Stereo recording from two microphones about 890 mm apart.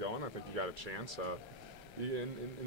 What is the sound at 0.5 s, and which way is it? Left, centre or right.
Speech, right.